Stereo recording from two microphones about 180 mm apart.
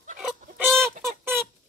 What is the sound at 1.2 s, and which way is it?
Rodents, 15° right (ahead or behind).